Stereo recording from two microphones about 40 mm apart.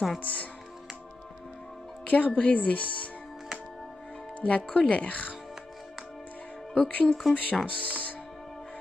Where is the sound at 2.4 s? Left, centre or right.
Left.